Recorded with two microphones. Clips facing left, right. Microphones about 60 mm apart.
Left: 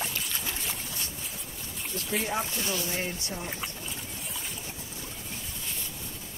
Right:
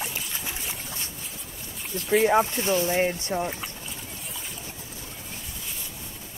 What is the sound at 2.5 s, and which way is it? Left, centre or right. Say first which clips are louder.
Speech: right 8 dB; right.